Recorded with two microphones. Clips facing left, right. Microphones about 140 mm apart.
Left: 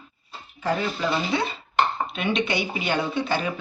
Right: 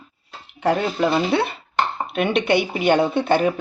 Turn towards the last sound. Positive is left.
turn(degrees=-55)  # may be behind; listen again after turning